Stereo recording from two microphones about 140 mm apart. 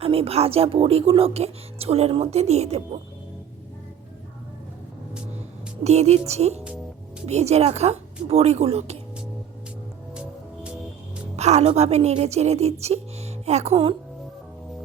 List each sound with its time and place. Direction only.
0.0 s speech: 45° right (ahead or behind)
5.8 s speech: 50° right (ahead or behind)
11.3 s speech: 50° right (ahead or behind)